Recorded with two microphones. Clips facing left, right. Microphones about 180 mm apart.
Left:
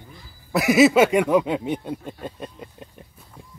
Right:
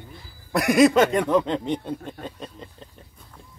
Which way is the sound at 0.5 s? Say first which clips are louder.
Left 1 dB; 5° left (ahead or behind).